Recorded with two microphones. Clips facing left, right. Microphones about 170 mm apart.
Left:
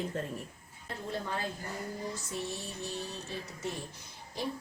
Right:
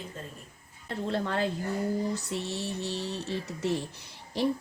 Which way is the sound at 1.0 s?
80° right.